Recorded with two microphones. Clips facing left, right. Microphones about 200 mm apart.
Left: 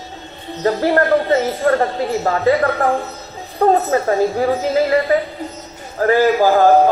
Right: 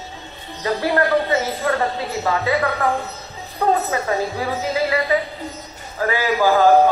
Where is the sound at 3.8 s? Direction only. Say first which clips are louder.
Left 6 dB; 45° left (ahead or behind).